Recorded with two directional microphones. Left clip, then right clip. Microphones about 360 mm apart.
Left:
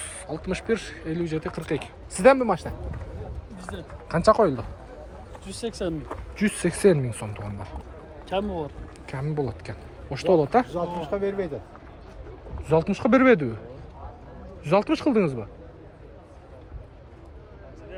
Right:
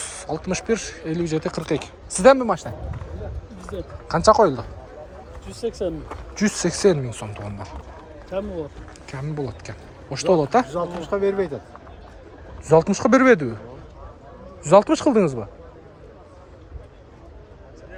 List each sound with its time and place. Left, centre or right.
0.0 s speech: centre
4.1 s speech: centre
5.8 s speech: left
6.6 s speech: centre
9.0 s speech: centre
10.7 s speech: right
12.6 s speech: centre
14.7 s speech: centre